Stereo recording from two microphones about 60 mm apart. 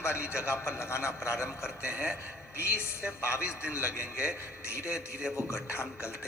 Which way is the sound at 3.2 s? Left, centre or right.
Left.